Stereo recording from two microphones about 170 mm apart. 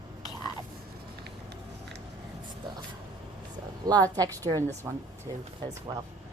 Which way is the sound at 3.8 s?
20° right (ahead or behind).